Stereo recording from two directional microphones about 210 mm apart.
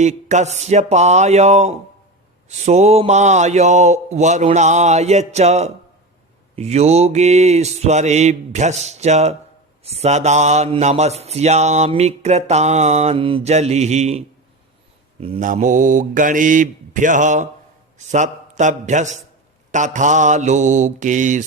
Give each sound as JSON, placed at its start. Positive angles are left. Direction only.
{"t": 0.0, "sound": "mantra", "side_deg": -35}
{"t": 17.9, "sound": "a man's voice", "side_deg": -35}
{"t": 19.7, "sound": "mantra", "side_deg": -35}